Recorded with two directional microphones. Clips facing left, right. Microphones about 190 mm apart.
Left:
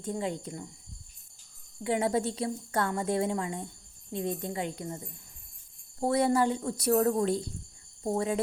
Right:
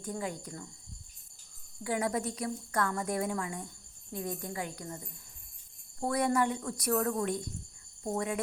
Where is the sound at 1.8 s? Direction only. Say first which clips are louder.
Left 4 dB; 25° left (ahead or behind).